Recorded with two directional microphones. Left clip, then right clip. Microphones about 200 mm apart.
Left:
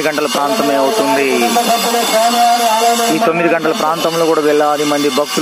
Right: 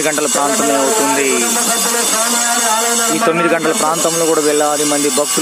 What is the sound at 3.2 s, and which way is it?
A man's voice, centre (ahead or behind).